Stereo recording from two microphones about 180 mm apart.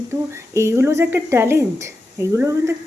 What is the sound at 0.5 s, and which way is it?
A woman's voice, 15° right (ahead or behind).